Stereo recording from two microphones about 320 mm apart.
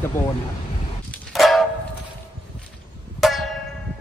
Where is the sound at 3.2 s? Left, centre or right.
Centre.